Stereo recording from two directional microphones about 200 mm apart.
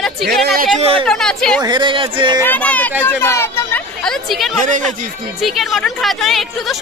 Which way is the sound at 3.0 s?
10° left (ahead or behind).